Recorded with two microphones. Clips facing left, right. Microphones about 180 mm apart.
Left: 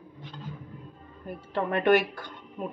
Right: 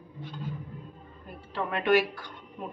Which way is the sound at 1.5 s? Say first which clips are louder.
Left 3 dB; 50° left (ahead or behind).